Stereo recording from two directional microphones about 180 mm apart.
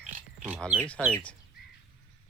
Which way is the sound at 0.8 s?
5° left (ahead or behind).